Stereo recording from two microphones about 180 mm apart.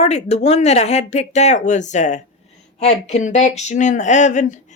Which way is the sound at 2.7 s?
40° left (ahead or behind).